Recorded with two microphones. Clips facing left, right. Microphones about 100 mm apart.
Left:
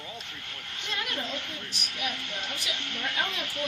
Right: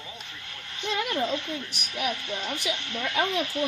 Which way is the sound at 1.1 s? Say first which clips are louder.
Right 7 dB; 20° right (ahead or behind).